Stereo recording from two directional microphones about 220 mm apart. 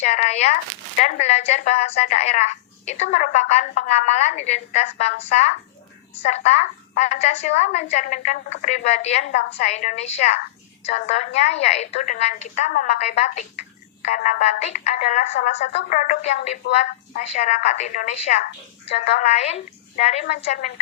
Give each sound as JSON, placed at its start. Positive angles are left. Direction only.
{"t": 0.0, "sound": "a woman's voice", "side_deg": 30}